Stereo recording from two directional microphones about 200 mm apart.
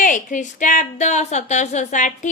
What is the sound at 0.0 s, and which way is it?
A woman's voice, 40° left (ahead or behind).